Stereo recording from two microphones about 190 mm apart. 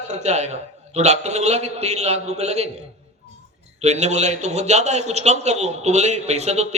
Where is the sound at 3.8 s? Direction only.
35° right (ahead or behind).